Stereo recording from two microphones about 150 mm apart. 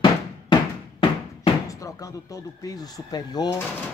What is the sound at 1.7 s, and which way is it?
Speech, 20° left (ahead or behind).